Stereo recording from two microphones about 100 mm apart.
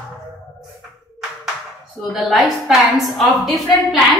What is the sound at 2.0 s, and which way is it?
A woman's voice, centre (ahead or behind).